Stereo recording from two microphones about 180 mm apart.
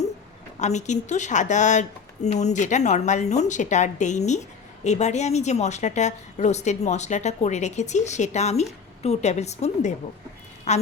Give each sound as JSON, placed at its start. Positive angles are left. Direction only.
{"t": 0.6, "sound": "a woman's voice", "side_deg": 40}